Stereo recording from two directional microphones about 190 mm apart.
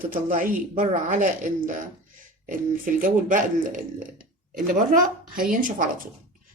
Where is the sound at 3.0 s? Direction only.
45° right (ahead or behind).